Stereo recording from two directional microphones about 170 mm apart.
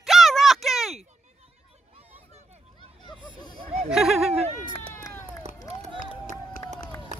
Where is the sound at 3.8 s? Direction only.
Centre (ahead or behind).